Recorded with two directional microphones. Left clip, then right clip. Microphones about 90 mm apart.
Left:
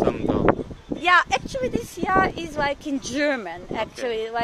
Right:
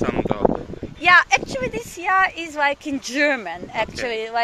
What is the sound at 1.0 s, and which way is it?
Speech, 20° left (ahead or behind).